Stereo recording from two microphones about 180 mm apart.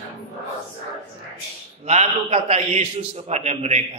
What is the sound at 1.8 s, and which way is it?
A man's voice, 35° right (ahead or behind).